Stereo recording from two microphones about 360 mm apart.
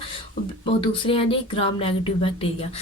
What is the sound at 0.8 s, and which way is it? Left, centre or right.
Speech, centre.